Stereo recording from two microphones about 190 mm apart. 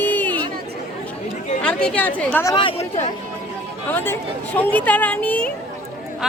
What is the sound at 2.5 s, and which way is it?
Speech, 25° left (ahead or behind).